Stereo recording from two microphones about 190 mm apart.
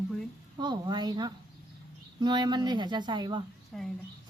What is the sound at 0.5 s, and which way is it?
Speech, 20° right (ahead or behind).